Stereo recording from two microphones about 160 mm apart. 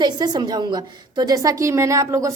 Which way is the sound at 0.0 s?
25° right (ahead or behind).